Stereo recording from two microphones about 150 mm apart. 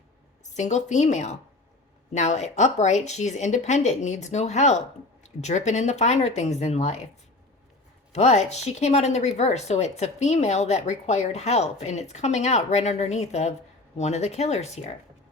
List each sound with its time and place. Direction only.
0.5 s speech: 50° left (ahead or behind)
8.1 s speech: 50° left (ahead or behind)